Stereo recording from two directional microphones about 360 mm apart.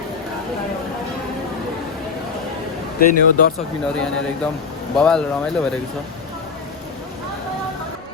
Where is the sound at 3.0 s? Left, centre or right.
Left.